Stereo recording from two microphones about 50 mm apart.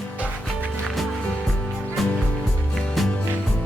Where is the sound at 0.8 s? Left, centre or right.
Centre.